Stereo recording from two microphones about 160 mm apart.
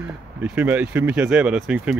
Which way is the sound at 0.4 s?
10° right (ahead or behind).